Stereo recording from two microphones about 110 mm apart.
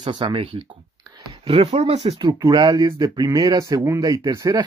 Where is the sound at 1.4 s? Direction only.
60° right (ahead or behind); by 2.2 s 75° right (ahead or behind).